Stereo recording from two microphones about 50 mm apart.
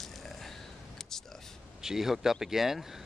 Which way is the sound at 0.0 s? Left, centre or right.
Centre.